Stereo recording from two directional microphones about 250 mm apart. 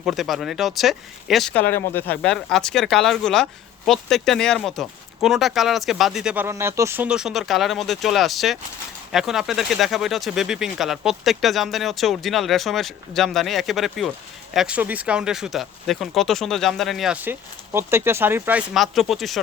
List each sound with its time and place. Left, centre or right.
0.0 s speech: centre